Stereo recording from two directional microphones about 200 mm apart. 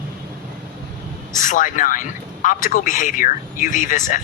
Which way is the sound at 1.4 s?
40° left (ahead or behind).